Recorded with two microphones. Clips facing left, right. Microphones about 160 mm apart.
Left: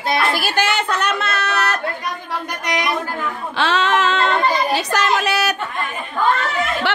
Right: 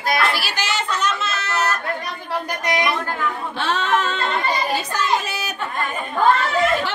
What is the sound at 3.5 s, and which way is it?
A child's voice, 90° left.